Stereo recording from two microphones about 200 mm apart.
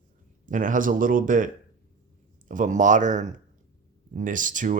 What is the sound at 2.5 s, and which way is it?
Speech, 40° right (ahead or behind).